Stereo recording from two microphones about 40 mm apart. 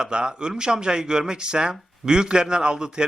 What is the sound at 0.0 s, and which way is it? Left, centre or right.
Speech, right.